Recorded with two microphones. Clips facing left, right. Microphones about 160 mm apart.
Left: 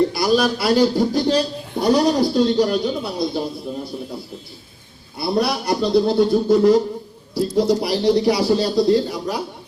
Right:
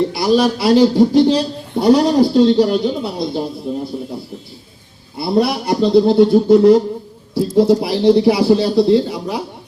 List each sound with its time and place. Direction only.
0.1 s speech: 25° right (ahead or behind)
5.2 s speech: 20° right (ahead or behind)